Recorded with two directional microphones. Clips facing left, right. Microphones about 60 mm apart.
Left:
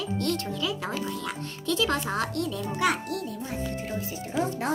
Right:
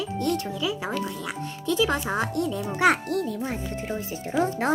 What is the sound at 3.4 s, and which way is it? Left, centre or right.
Speech, right.